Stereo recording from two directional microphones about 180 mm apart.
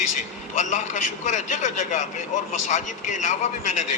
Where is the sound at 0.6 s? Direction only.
45° left (ahead or behind).